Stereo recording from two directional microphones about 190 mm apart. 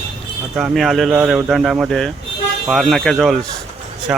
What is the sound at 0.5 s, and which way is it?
Speech, 5° right (ahead or behind).